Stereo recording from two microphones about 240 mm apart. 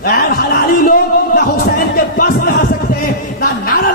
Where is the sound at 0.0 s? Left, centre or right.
Left.